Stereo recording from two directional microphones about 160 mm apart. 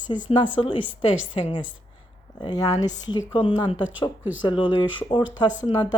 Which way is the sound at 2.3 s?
25° left (ahead or behind).